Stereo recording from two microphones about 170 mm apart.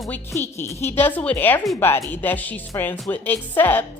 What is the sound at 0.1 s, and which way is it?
Speech, 15° left (ahead or behind).